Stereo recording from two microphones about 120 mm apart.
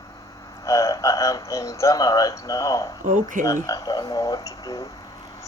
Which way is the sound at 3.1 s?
90° right.